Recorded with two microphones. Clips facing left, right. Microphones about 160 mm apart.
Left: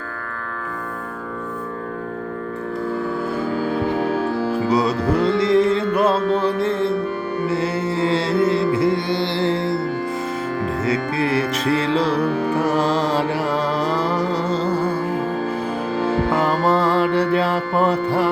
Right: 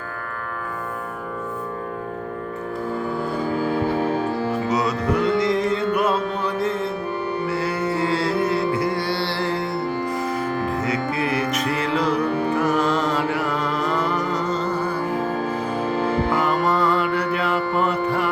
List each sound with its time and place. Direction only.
4.2 s music: centre (ahead or behind)
4.7 s music: 30° left (ahead or behind)
10.8 s music: 30° left (ahead or behind)
16.3 s music: 30° left (ahead or behind)